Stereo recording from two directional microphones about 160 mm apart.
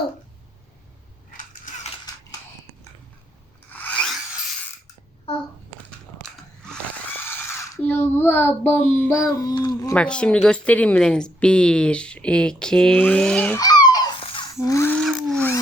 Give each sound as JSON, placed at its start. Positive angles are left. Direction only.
{"t": 1.3, "sound": "mechanisms", "side_deg": 55}
{"t": 3.7, "sound": "rub", "side_deg": 10}
{"t": 7.2, "sound": "a sound", "side_deg": 15}
{"t": 9.0, "sound": "a child's voice", "side_deg": 15}
{"t": 9.9, "sound": "a woman's voice", "side_deg": 5}
{"t": 13.6, "sound": "babbling", "side_deg": 25}
{"t": 15.3, "sound": "a sound", "side_deg": 10}